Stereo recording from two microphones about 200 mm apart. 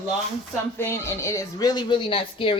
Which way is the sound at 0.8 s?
15° left (ahead or behind).